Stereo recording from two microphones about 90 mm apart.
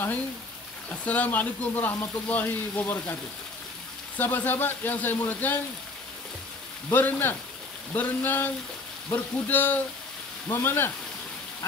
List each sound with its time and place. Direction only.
0.8 s speech: 15° left (ahead or behind)
4.2 s speech: 20° left (ahead or behind)
6.9 s speech: 20° left (ahead or behind)